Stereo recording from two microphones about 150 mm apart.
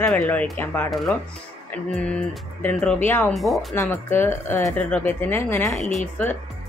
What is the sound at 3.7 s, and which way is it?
A woman's voice, 15° left (ahead or behind).